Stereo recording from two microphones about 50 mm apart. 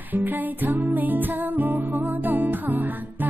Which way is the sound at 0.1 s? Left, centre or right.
Right.